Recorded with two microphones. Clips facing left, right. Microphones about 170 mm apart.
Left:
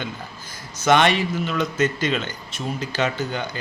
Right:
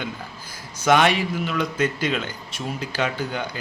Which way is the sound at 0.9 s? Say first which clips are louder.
Left 1 dB; 5° right (ahead or behind).